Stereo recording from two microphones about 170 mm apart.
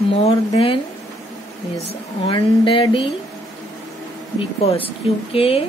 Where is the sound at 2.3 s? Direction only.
30° left (ahead or behind).